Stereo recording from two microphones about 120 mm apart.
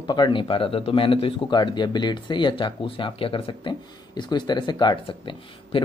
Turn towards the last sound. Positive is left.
turn(degrees=45)  # may be behind; listen again after turning